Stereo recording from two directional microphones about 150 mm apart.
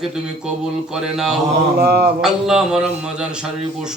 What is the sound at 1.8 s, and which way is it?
Mantra, 90° right.